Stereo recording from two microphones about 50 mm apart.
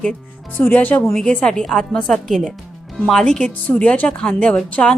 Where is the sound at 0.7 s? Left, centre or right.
Left.